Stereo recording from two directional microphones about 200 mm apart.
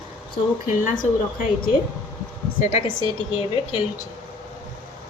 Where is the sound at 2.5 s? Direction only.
35° left (ahead or behind).